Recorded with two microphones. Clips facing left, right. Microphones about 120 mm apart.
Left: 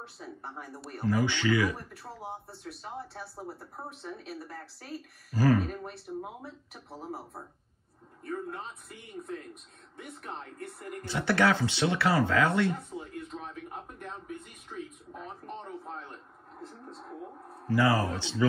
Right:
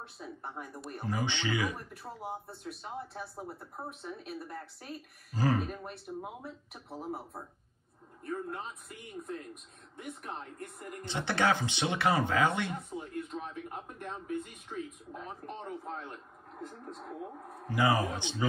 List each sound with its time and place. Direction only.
0.0 s speech: centre (ahead or behind)
1.0 s speech: 20° right (ahead or behind)
1.8 s speech: centre (ahead or behind)
5.3 s speech: 20° right (ahead or behind)
5.7 s speech: centre (ahead or behind)
11.1 s speech: 20° right (ahead or behind)
12.9 s speech: centre (ahead or behind)
17.6 s speech: 20° right (ahead or behind)